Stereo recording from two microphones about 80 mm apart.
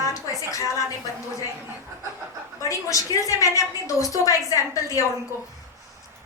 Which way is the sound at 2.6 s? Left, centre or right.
Left.